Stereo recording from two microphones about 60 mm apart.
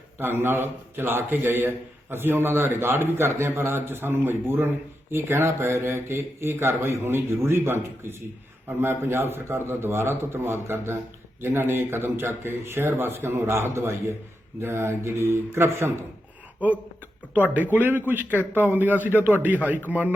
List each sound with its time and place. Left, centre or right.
0.2 s a man's voice: right
17.3 s a man's voice: right